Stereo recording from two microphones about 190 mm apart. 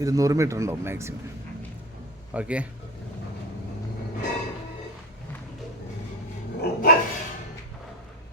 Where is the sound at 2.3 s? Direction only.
5° right (ahead or behind).